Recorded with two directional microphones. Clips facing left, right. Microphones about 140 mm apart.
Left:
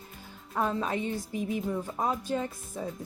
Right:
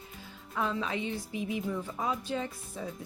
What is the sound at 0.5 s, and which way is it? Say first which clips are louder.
A woman's voice: left 3 dB; 45° left (ahead or behind).